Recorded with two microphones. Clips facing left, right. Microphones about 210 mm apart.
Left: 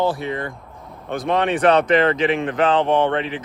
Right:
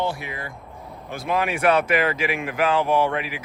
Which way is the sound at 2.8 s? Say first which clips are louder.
Left 3 dB; 30° left (ahead or behind).